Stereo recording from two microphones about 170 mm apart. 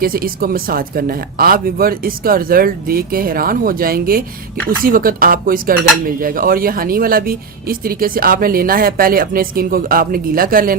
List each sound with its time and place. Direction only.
0.0 s speech: 60° right (ahead or behind)